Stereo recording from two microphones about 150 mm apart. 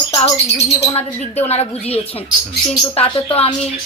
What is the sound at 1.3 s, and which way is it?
Speech, 45° left (ahead or behind).